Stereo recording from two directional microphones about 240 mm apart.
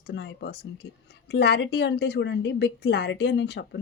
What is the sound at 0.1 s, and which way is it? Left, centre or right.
A woman's voice, left.